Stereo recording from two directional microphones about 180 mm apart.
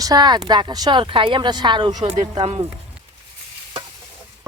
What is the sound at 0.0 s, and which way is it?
Speech, 20° right (ahead or behind).